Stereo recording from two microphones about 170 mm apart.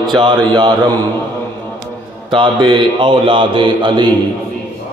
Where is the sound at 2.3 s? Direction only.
30° right (ahead or behind).